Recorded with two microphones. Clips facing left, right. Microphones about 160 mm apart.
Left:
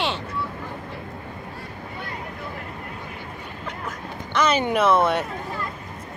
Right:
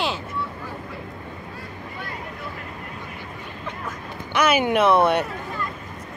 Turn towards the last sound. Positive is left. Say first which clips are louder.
# right 2 dB
turn(degrees=0)  # may be behind; listen again after turning